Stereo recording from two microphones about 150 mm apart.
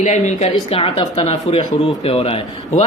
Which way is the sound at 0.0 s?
50° left (ahead or behind).